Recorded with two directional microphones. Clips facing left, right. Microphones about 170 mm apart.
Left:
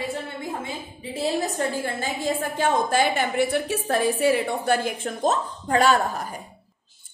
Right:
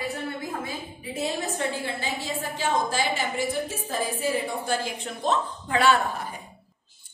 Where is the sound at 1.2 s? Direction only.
40° left (ahead or behind).